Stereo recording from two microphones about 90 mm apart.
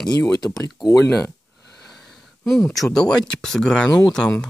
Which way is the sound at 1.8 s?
Centre (ahead or behind).